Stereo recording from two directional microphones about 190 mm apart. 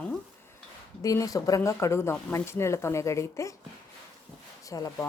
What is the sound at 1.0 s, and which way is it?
Speech, 20° left (ahead or behind).